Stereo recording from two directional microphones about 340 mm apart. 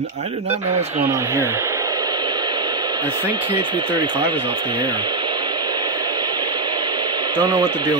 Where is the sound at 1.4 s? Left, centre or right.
Centre.